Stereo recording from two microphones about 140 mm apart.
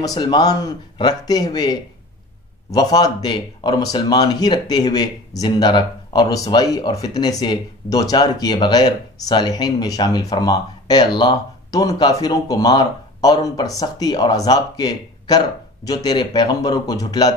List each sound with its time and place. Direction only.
0.0 s speech: 30° left (ahead or behind)